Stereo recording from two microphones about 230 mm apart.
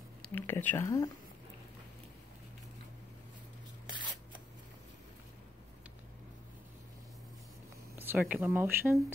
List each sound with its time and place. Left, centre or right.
0.2 s speech: centre
3.9 s scissors: centre
8.0 s speech: centre